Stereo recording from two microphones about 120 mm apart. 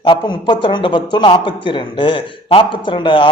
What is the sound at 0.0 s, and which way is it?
A man's voice, 40° left (ahead or behind).